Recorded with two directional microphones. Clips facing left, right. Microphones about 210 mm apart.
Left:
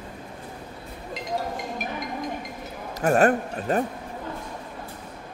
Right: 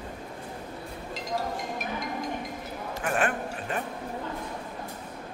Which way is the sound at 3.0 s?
40° left (ahead or behind).